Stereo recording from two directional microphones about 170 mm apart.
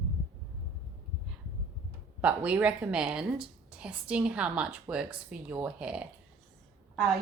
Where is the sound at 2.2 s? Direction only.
10° right (ahead or behind).